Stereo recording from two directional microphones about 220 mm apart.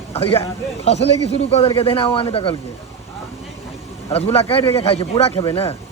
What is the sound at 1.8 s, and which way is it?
Speech, 25° left (ahead or behind).